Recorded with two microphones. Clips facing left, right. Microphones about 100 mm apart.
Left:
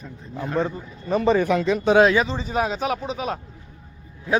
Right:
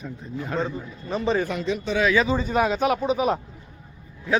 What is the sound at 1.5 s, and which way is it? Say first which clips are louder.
Speech: left 6 dB; 80° left.